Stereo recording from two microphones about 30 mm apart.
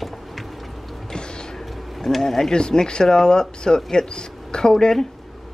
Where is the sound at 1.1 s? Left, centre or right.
Left.